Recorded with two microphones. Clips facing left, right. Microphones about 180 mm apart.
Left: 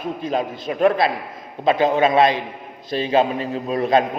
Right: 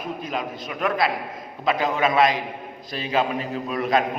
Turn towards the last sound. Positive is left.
turn(degrees=25)  # may be behind; listen again after turning